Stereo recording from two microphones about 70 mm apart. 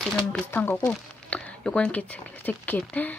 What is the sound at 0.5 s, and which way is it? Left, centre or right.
Speech, left.